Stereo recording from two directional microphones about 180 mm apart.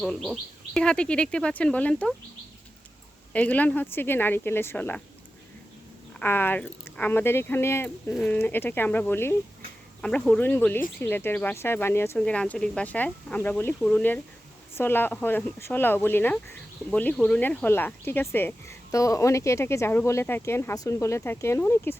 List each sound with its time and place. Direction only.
0.0 s speech: centre (ahead or behind)
3.3 s speech: 10° left (ahead or behind)
6.1 s speech: 10° left (ahead or behind)